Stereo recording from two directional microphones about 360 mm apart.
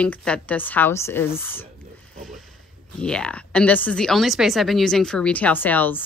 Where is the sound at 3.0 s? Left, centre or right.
Centre.